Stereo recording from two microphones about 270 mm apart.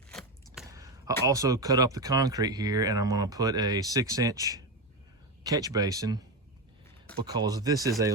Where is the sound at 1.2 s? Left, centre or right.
Centre.